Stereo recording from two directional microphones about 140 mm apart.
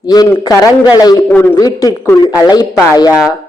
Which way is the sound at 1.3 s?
15° left (ahead or behind).